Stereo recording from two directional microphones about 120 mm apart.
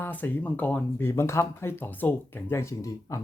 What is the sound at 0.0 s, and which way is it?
Speech, 15° left (ahead or behind).